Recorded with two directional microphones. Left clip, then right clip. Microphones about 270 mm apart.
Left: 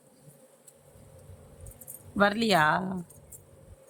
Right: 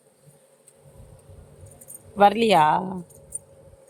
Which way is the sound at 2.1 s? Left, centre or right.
Centre.